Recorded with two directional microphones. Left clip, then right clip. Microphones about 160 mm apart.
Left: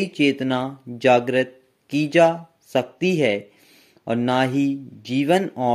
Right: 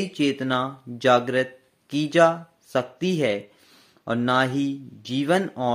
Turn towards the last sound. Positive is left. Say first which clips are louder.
# left 3 dB
turn(degrees=25)  # may be behind; listen again after turning